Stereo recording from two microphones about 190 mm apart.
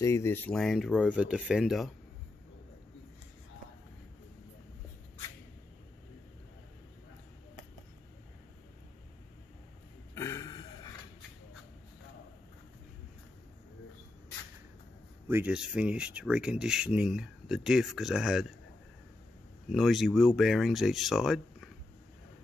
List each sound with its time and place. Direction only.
0.0 s speech: 15° left (ahead or behind); by 1.9 s 5° right (ahead or behind)
10.1 s throat clearing: 15° left (ahead or behind)
15.2 s speech: 10° right (ahead or behind)
19.7 s speech: centre (ahead or behind)